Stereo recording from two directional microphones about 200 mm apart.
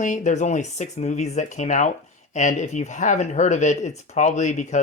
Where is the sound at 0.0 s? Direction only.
35° left (ahead or behind).